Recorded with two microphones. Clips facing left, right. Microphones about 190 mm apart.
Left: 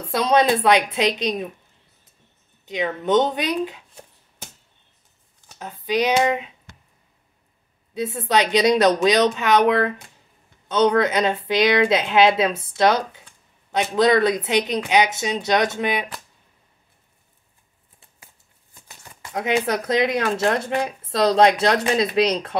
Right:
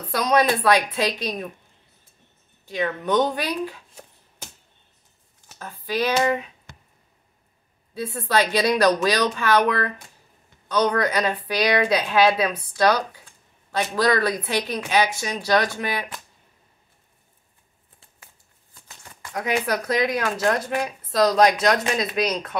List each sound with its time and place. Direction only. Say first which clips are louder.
0.0 s speech: left 2 dB; 25° left (ahead or behind)
2.6 s speech: left 1 dB; 20° left (ahead or behind)
5.6 s speech: left 3 dB; 20° left (ahead or behind)
7.9 s speech: left 2 dB; 20° left (ahead or behind)
19.3 s speech: left 2 dB; 25° left (ahead or behind)